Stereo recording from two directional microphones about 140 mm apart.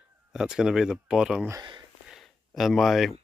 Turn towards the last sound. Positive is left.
turn(degrees=0)  # may be behind; listen again after turning